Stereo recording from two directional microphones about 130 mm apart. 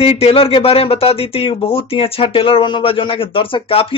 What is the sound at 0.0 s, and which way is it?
Speech, 50° left (ahead or behind).